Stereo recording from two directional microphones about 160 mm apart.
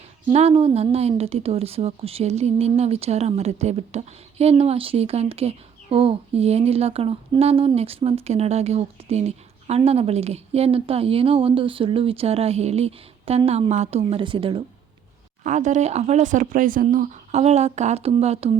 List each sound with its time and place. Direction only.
0.3 s a woman's voice: 40° right (ahead or behind)
15.4 s speech: 50° right (ahead or behind)